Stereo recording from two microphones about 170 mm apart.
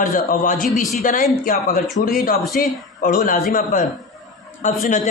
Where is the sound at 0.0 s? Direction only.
55° left (ahead or behind).